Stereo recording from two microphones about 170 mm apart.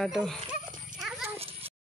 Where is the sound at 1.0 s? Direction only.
Centre (ahead or behind).